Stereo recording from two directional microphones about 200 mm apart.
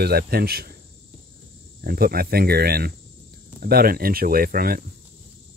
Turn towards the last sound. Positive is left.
turn(degrees=-50)  # may be behind; listen again after turning